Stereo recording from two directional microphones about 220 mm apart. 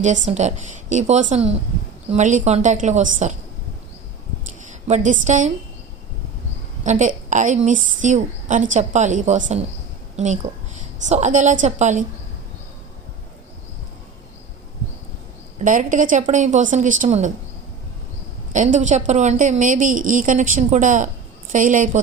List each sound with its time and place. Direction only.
0.0 s a woman's voice: 35° right (ahead or behind)
4.6 s a woman's voice: 35° right (ahead or behind)
6.8 s a woman's voice: 35° right (ahead or behind)
15.5 s a woman's voice: 35° right (ahead or behind)
18.5 s a woman's voice: 35° right (ahead or behind)